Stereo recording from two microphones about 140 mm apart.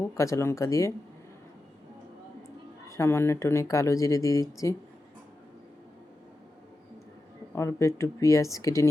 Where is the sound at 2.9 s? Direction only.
20° left (ahead or behind).